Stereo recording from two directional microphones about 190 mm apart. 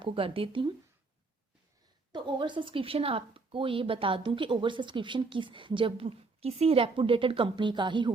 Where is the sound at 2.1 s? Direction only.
25° right (ahead or behind).